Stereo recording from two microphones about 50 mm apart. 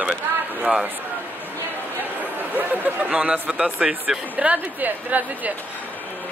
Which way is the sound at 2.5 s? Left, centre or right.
Right.